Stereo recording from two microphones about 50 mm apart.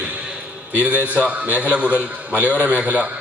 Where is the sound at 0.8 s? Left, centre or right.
Right.